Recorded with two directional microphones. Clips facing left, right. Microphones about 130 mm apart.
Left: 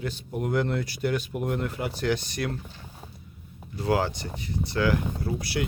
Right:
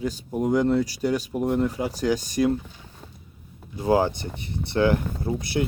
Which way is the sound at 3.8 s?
20° right (ahead or behind).